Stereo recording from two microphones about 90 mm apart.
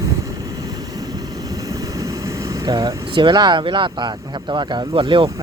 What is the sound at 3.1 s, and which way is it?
Speech, 60° right (ahead or behind).